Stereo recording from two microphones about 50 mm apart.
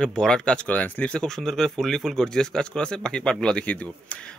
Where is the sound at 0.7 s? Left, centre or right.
Left.